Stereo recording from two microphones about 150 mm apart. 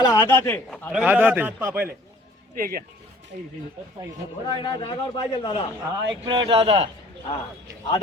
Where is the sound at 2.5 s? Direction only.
70° right (ahead or behind).